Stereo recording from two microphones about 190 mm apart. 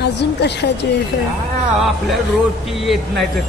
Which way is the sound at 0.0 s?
60° left (ahead or behind).